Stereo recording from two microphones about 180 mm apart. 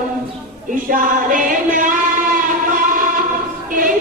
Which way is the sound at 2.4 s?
50° right (ahead or behind).